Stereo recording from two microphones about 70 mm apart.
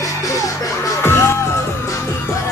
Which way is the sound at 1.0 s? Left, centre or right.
Left.